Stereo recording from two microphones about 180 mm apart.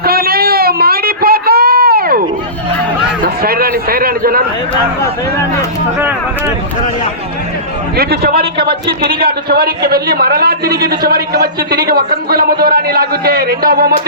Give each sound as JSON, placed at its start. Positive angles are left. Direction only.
{"t": 0.0, "sound": "a sound", "side_deg": -55}
{"t": 3.2, "sound": "a man's voice", "side_deg": -55}
{"t": 7.9, "sound": "a man's voice", "side_deg": -60}